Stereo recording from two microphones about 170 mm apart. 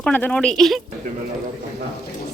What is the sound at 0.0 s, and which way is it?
Speech, 10° left (ahead or behind).